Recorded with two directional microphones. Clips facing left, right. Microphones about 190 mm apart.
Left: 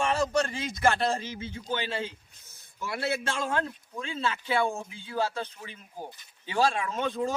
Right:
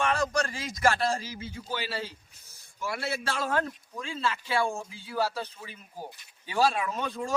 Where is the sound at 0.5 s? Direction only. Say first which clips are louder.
Left 1 dB; centre (ahead or behind).